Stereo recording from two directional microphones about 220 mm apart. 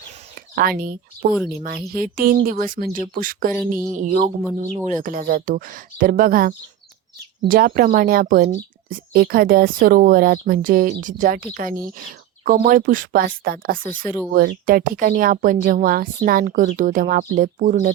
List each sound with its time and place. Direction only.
0.3 s speech: 40° right (ahead or behind)